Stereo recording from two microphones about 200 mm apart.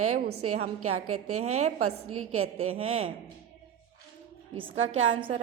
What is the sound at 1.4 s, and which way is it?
Speech, 35° right (ahead or behind).